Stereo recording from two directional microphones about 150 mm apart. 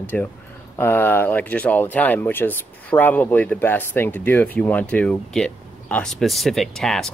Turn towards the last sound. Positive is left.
turn(degrees=5)  # may be behind; listen again after turning